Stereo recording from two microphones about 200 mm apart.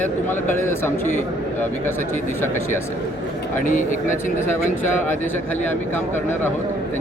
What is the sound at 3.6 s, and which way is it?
Speech, 40° left (ahead or behind).